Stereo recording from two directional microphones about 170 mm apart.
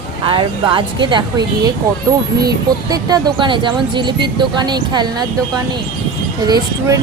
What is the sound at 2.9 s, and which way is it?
Speech, 20° right (ahead or behind).